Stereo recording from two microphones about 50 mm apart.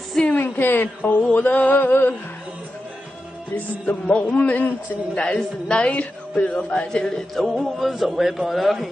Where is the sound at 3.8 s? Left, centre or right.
Left.